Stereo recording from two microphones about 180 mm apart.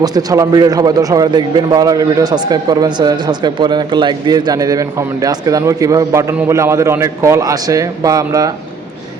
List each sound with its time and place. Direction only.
0.0 s a man's voice: 20° right (ahead or behind)